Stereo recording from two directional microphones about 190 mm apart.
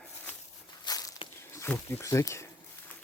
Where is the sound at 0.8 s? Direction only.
20° left (ahead or behind).